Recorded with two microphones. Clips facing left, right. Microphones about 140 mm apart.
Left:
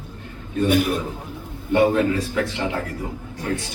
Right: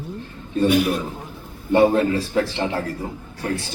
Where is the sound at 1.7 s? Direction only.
30° right (ahead or behind).